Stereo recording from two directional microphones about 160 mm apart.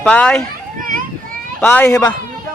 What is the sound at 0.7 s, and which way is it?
Children playing, 60° right (ahead or behind).